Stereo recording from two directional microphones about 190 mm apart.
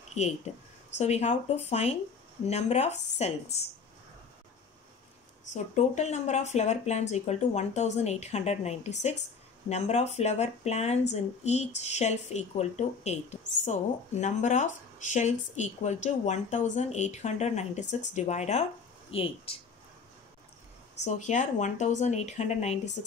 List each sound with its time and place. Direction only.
0.2 s speech: 35° left (ahead or behind)
5.5 s speech: 40° left (ahead or behind)
21.0 s speech: 40° left (ahead or behind)